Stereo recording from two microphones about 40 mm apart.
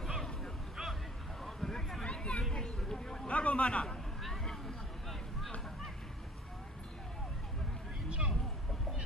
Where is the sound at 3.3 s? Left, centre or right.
Left.